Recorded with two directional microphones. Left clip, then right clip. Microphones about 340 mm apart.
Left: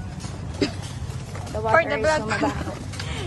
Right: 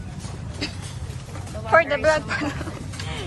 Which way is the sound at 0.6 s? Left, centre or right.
Centre.